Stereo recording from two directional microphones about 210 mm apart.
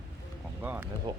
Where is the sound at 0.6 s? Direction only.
10° right (ahead or behind).